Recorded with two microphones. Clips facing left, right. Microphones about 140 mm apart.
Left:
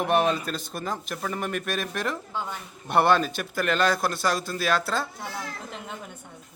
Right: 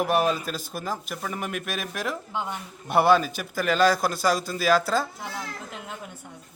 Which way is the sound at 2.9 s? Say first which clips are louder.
Right 1 dB; 5° right (ahead or behind).